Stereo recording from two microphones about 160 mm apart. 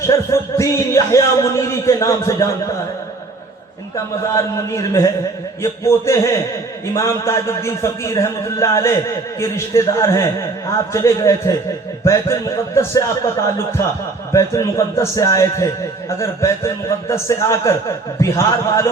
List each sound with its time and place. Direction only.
0.0 s speech: 15° left (ahead or behind)
3.9 s speech: 20° left (ahead or behind)
14.3 s speech: 20° left (ahead or behind)